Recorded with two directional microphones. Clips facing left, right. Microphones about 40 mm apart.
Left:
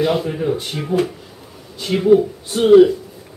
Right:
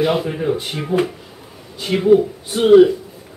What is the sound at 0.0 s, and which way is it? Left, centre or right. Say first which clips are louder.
A man's voice: even; centre.